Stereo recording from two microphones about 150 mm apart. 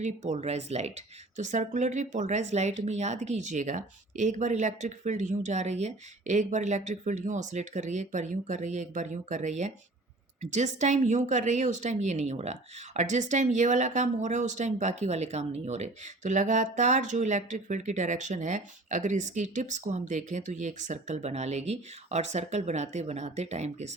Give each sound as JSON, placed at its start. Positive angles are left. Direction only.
{"t": 0.0, "sound": "speech", "side_deg": -50}